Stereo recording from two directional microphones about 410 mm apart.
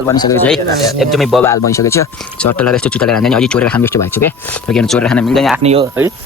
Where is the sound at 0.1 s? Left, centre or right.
Centre.